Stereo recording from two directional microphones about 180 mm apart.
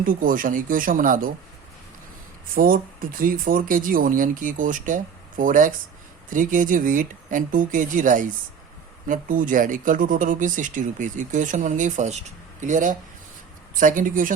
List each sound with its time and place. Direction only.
0.0 s speech: 50° right (ahead or behind)
2.6 s speech: 50° right (ahead or behind)